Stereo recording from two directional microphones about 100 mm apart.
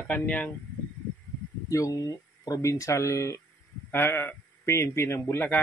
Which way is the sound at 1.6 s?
35° left (ahead or behind).